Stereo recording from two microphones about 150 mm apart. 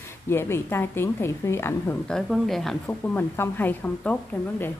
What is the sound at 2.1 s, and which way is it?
Speech, centre (ahead or behind).